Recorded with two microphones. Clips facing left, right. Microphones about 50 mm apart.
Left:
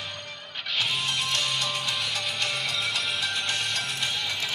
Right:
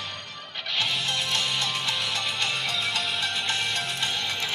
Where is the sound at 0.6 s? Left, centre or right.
Centre.